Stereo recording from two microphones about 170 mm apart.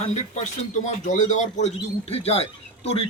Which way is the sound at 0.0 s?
40° left (ahead or behind).